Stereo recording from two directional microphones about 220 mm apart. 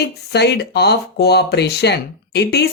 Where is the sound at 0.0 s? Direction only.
50° left (ahead or behind).